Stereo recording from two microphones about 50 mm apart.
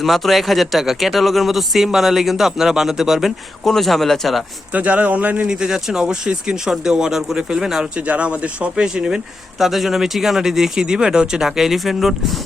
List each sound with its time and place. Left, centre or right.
0.0 s speech: centre
3.6 s speech: centre
4.7 s speech: right
5.5 s speech: centre
7.9 s speech: right
9.6 s speech: centre